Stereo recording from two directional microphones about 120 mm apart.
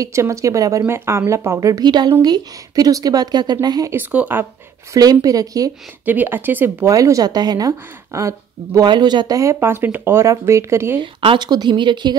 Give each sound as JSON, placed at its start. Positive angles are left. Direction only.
{"t": 0.0, "sound": "speech", "side_deg": -25}
{"t": 3.9, "sound": "speech", "side_deg": -15}
{"t": 4.9, "sound": "speech", "side_deg": -30}
{"t": 6.0, "sound": "speech", "side_deg": -15}
{"t": 6.9, "sound": "speech", "side_deg": -30}
{"t": 8.8, "sound": "speech", "side_deg": -35}
{"t": 11.0, "sound": "speech", "side_deg": -45}